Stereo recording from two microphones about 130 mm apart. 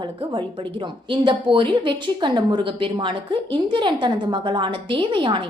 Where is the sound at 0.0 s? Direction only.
35° right (ahead or behind).